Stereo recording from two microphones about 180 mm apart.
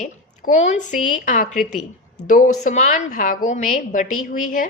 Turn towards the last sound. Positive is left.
turn(degrees=45)  # may be behind; listen again after turning